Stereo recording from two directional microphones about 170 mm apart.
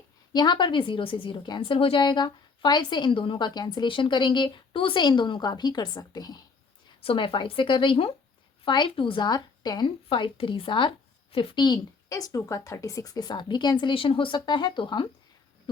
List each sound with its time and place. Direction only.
0.3 s a woman's voice: 25° left (ahead or behind)